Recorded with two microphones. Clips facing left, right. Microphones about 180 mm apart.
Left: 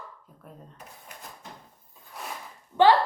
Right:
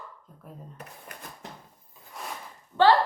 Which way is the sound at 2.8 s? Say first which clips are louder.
Left 1 dB; 15° left (ahead or behind).